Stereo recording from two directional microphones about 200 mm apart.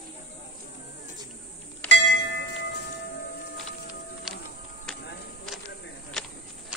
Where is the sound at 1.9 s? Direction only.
65° left (ahead or behind).